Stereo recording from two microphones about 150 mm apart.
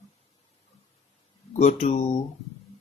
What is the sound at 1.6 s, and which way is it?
Speech, 50° left (ahead or behind).